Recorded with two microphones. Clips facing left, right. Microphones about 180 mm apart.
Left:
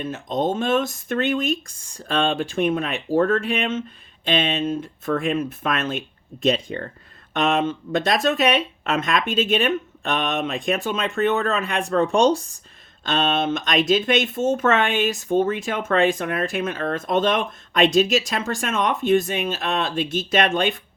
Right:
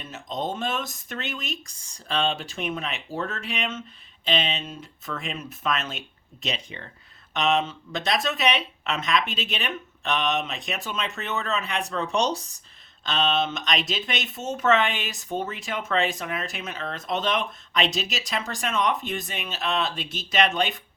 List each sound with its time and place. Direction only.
0.0 s speech: 50° left (ahead or behind)